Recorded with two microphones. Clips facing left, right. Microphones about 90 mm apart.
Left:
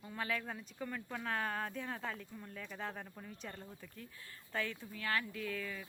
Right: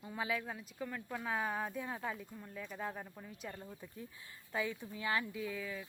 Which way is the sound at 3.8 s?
20° right (ahead or behind).